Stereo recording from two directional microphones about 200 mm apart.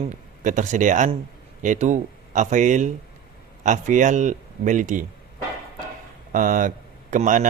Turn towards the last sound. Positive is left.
turn(degrees=-40)  # may be behind; listen again after turning